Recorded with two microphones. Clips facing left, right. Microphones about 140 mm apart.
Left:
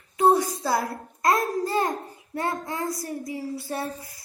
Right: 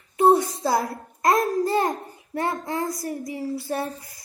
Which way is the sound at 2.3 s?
25° right (ahead or behind).